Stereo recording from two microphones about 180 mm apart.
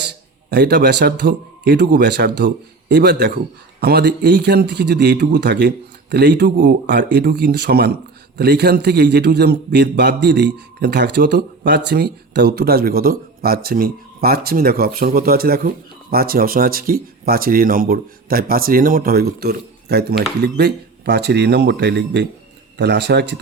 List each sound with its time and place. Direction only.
0.1 s a man's voice: 70° right (ahead or behind)